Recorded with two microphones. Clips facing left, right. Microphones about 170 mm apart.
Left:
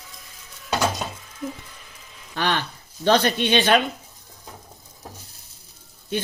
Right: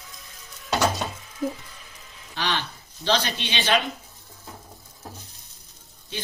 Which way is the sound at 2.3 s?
45° left (ahead or behind).